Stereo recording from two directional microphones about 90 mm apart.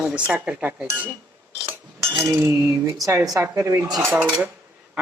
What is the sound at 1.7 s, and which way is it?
Chink, 30° right (ahead or behind).